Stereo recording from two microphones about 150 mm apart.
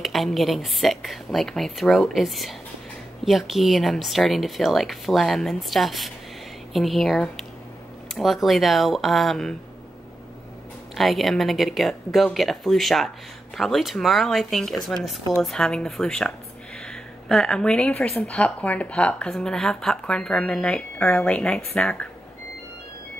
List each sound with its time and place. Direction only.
0.0 s a woman's voice: centre (ahead or behind)
11.0 s a woman's voice: centre (ahead or behind)